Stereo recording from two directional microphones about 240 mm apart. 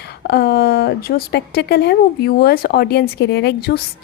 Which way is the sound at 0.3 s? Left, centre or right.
Left.